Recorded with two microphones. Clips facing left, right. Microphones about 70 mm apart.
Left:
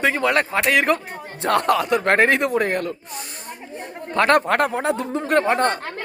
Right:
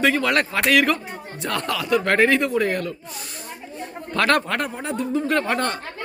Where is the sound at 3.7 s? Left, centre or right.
Left.